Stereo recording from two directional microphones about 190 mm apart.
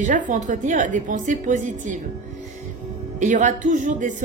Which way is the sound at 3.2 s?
40° right (ahead or behind).